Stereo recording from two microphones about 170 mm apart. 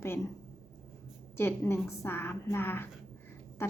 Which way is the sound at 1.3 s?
15° left (ahead or behind).